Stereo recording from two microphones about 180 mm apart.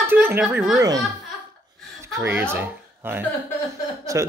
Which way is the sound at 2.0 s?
15° right (ahead or behind).